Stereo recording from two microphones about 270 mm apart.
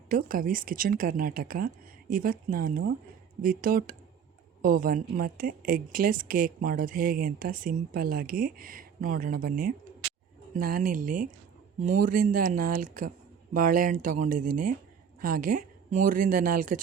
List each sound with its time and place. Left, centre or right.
0.1 s speech: right